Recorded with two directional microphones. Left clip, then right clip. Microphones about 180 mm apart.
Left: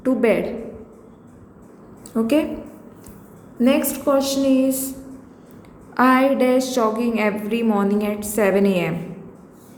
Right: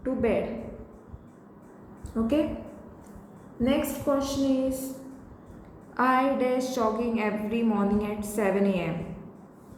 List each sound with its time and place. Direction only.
0.0 s a woman's voice: 40° left (ahead or behind)
2.1 s a woman's voice: 40° left (ahead or behind)
3.6 s a woman's voice: 45° left (ahead or behind)
6.0 s a woman's voice: 35° left (ahead or behind)